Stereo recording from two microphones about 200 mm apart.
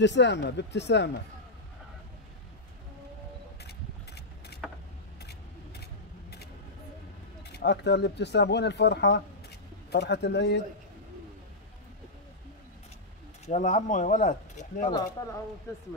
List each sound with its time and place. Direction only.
0.0 s speech: 60° left (ahead or behind)
3.6 s vehicle: 55° left (ahead or behind)
7.4 s speech: 55° left (ahead or behind)
13.5 s speech: 35° left (ahead or behind)
14.9 s speech: 20° left (ahead or behind)